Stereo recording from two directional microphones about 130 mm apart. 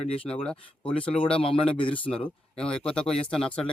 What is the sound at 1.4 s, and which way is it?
Speech, 45° left (ahead or behind).